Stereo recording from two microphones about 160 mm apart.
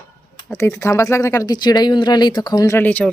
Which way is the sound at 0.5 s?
15° left (ahead or behind).